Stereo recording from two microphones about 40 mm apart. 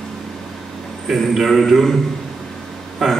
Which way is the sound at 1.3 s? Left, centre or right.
Centre.